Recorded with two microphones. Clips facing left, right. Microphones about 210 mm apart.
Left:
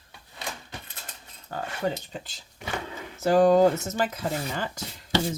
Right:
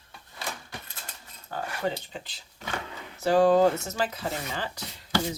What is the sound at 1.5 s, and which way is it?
Speech, 40° left (ahead or behind).